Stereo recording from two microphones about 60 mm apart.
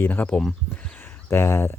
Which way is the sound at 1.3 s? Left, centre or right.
Left.